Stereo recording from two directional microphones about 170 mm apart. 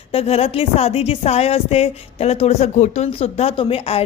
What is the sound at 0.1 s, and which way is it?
A woman's voice, 35° left (ahead or behind).